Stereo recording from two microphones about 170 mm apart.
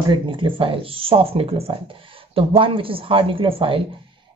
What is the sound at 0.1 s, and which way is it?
Speech, 30° right (ahead or behind).